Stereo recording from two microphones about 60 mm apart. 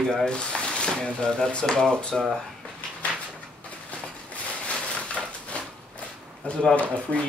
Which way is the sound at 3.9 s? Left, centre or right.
Left.